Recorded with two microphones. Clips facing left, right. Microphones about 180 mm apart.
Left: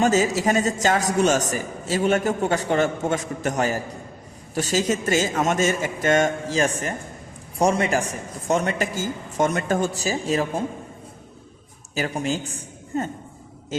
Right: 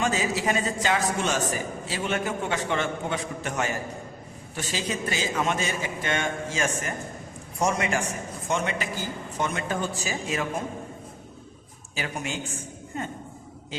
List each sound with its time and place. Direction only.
0.0 s a man's voice: 40° left (ahead or behind)
11.9 s a man's voice: 35° left (ahead or behind)